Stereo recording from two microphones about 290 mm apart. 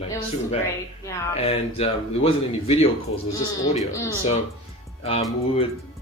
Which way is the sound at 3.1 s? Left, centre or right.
Left.